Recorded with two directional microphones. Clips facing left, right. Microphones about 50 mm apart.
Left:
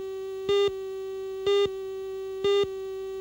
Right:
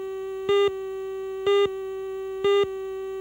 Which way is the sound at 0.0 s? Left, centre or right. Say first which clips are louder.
Right 3 dB; right.